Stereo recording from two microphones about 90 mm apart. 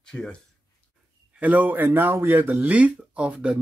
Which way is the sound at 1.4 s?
20° right (ahead or behind).